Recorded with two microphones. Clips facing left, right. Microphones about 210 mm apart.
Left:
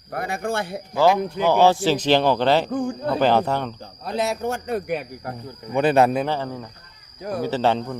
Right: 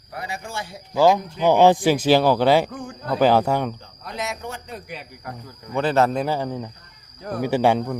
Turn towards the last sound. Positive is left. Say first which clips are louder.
# right 2 dB
turn(degrees=-10)  # may be behind; listen again after turning